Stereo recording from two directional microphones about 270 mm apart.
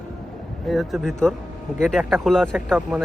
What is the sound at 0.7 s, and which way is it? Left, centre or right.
Speech, centre.